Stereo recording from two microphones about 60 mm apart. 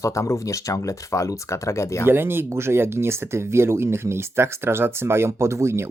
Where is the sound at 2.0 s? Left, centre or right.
Right.